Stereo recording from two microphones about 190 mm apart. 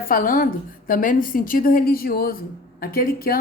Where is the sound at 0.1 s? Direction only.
45° left (ahead or behind).